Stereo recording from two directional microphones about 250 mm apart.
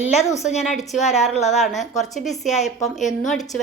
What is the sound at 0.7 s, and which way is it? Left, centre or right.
A woman's voice, centre.